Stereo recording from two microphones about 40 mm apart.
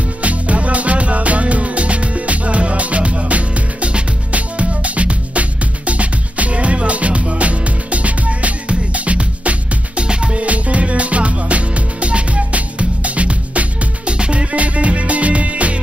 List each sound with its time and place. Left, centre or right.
0.2 s music: right